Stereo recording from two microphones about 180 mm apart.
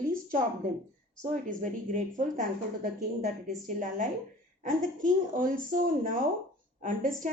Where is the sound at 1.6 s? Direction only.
45° right (ahead or behind).